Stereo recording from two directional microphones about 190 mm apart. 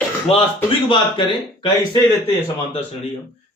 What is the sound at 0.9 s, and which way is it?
Speech, 25° left (ahead or behind).